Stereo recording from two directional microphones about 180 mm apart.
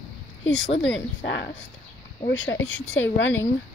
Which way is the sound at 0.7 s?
85° left.